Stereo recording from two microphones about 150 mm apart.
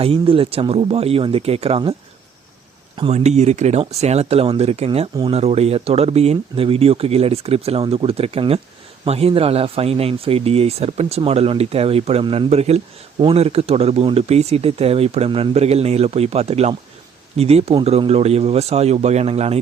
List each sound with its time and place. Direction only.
0.0 s speech: 40° right (ahead or behind)
3.1 s speech: 50° right (ahead or behind)